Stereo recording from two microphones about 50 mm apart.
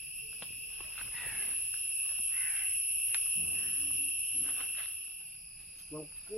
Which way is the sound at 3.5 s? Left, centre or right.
Centre.